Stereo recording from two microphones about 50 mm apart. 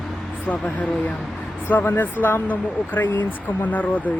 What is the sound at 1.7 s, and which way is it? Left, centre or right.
Speech, left.